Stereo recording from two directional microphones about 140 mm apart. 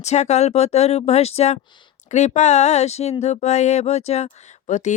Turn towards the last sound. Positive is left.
turn(degrees=60)  # may be behind; listen again after turning